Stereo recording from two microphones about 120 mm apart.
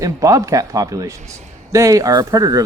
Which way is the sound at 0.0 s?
30° right (ahead or behind).